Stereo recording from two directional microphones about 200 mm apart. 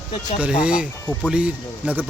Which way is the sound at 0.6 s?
5° right (ahead or behind).